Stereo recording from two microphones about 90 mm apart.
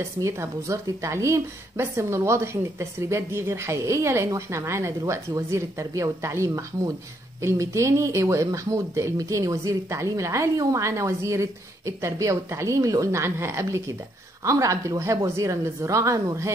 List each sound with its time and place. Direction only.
0.2 s speech: 35° right (ahead or behind)